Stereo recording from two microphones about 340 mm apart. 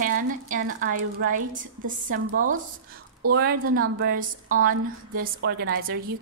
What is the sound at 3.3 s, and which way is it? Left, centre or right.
A woman's voice, right.